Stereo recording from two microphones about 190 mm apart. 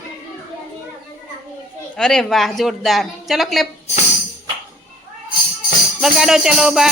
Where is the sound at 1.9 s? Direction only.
5° left (ahead or behind).